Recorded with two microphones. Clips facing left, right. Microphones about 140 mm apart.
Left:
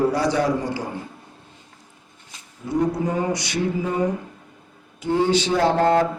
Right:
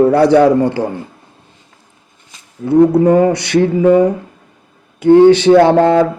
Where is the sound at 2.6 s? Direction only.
65° right (ahead or behind).